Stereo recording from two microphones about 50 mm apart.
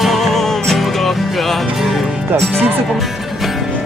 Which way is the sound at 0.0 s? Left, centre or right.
Centre.